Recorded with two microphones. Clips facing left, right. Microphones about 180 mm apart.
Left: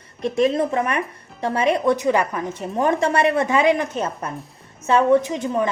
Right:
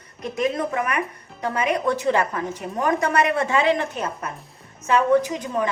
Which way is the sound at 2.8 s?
30° left (ahead or behind).